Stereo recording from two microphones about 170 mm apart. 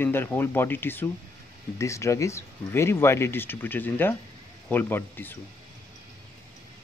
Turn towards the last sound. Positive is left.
turn(degrees=10)  # may be behind; listen again after turning